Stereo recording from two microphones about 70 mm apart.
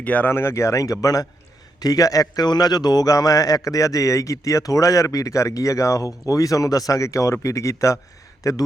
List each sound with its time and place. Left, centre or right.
0.0 s speech: left
0.3 s a man's voice: left